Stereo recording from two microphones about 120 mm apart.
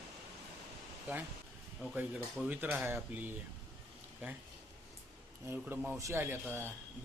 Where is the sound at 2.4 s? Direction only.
15° right (ahead or behind).